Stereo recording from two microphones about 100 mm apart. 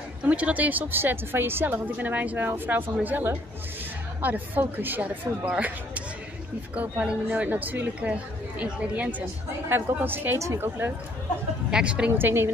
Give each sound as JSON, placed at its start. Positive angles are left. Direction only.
{"t": 0.2, "sound": "a woman's voice", "side_deg": -15}
{"t": 11.7, "sound": "a woman's voice", "side_deg": -10}